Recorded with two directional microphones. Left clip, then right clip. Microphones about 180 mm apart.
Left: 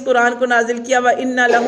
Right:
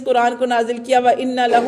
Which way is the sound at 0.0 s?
40° right (ahead or behind).